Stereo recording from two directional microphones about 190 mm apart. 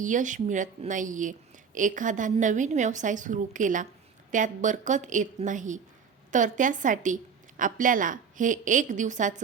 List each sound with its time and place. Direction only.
0.0 s a woman's voice: 40° right (ahead or behind)